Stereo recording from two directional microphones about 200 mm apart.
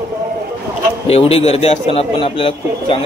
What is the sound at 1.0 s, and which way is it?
A man's voice, 30° left (ahead or behind).